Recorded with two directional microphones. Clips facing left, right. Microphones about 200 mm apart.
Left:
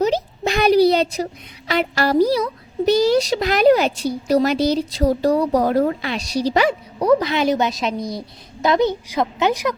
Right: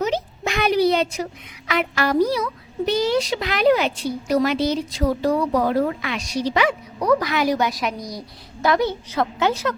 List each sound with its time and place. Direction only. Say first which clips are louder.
0.0 s a woman's voice: left 4 dB; 35° left (ahead or behind)
7.1 s a woman's voice: left 3 dB; 25° left (ahead or behind)